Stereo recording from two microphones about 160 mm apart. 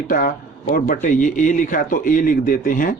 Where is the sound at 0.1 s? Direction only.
60° left (ahead or behind).